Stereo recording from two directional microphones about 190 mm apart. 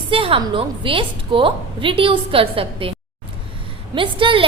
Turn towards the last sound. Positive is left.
turn(degrees=-25)  # may be behind; listen again after turning